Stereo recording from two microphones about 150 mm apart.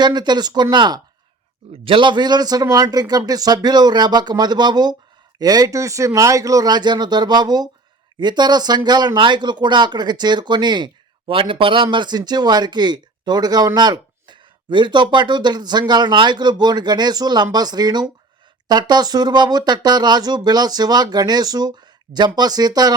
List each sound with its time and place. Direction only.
0.0 s speech: 30° right (ahead or behind)